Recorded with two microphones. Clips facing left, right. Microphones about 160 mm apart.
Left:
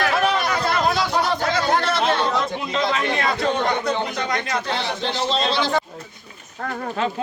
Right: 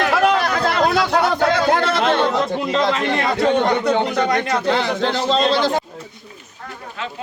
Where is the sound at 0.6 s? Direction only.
65° right (ahead or behind).